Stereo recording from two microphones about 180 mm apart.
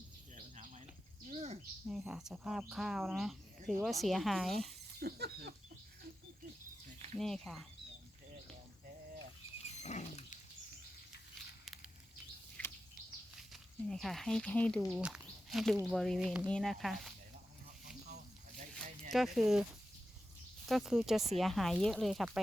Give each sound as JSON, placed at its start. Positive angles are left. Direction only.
{"t": 1.3, "sound": "bird", "side_deg": -35}
{"t": 1.9, "sound": "speech", "side_deg": -5}
{"t": 4.9, "sound": "a sound", "side_deg": -65}
{"t": 7.2, "sound": "speech", "side_deg": 0}
{"t": 9.8, "sound": "dog", "side_deg": 40}
{"t": 12.6, "sound": "a sound", "side_deg": 10}
{"t": 13.5, "sound": "speech", "side_deg": 0}
{"t": 19.1, "sound": "speech", "side_deg": 0}
{"t": 20.7, "sound": "speech", "side_deg": 0}